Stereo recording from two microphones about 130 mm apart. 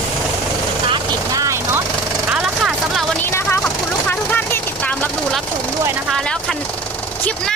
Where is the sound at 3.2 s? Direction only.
20° left (ahead or behind).